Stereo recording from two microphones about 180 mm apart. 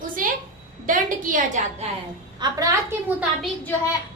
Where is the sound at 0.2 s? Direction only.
50° right (ahead or behind).